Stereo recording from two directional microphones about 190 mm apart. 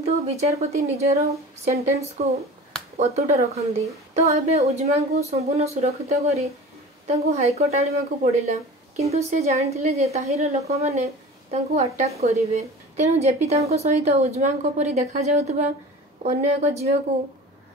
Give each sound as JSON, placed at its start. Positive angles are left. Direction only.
{"t": 0.1, "sound": "a woman's voice", "side_deg": -35}